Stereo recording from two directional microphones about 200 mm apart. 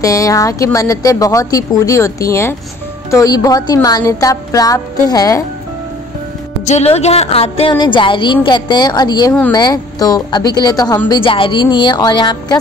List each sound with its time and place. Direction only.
0.0 s speech: 15° left (ahead or behind)
6.6 s a woman's voice: 35° left (ahead or behind)